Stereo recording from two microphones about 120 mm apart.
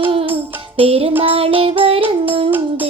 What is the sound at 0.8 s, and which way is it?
Music, 55° right (ahead or behind).